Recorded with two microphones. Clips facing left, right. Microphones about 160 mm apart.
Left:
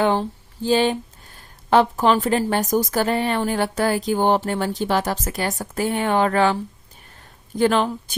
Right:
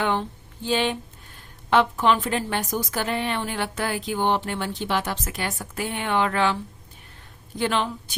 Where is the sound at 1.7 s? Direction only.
40° left (ahead or behind).